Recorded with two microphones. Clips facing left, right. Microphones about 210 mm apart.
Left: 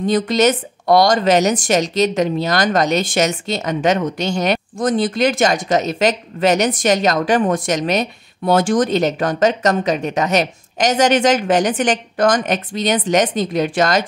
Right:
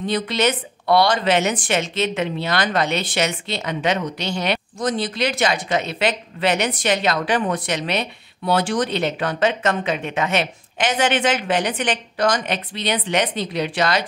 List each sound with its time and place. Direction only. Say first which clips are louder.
0.0 s speech: left 6 dB; 45° left (ahead or behind)